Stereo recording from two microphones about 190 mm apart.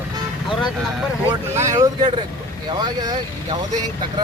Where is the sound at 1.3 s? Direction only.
15° right (ahead or behind).